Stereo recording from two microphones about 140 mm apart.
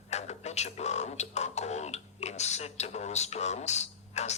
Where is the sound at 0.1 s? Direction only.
50° left (ahead or behind).